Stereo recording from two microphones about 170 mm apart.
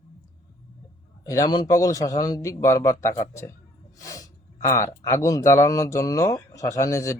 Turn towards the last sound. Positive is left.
turn(degrees=20)  # may be behind; listen again after turning